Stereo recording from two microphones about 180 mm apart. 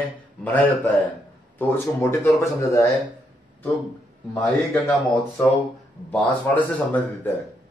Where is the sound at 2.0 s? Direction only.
15° left (ahead or behind).